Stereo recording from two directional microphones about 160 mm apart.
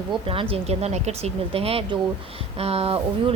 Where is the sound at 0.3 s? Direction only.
35° right (ahead or behind).